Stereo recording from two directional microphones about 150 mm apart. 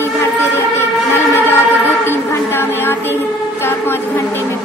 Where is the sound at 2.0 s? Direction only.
15° left (ahead or behind).